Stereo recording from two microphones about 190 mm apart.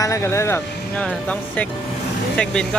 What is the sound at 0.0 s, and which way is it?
Speech, 15° left (ahead or behind).